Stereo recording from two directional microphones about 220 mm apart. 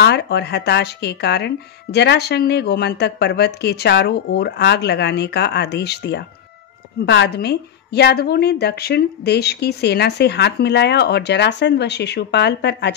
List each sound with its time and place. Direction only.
0.0 s speech: 50° left (ahead or behind)